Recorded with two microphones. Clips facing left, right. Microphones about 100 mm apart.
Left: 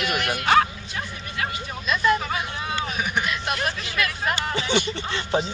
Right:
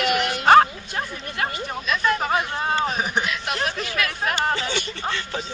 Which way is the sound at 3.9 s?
Centre (ahead or behind).